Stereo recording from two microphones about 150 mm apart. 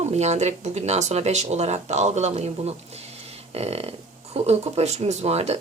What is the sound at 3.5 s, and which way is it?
Speech, 40° right (ahead or behind).